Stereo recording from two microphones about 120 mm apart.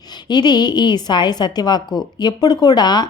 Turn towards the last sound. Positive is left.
turn(degrees=35)  # may be behind; listen again after turning